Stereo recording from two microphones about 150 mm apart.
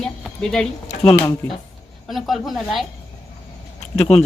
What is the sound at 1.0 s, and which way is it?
Speech, 15° left (ahead or behind).